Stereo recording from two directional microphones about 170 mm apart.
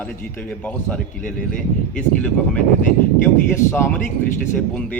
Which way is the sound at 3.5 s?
15° left (ahead or behind).